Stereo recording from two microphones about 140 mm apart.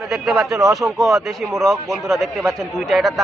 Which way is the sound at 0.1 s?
Centre (ahead or behind).